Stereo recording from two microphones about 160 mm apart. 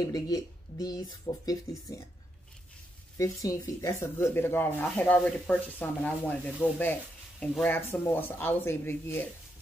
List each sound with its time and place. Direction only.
0.0 s speech: 20° left (ahead or behind)
3.2 s speech: 20° left (ahead or behind)